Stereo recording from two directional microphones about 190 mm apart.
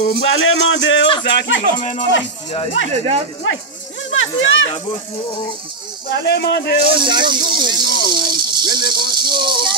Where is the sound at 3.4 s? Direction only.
90° left.